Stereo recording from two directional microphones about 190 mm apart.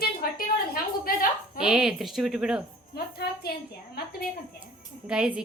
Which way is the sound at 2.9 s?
55° left (ahead or behind).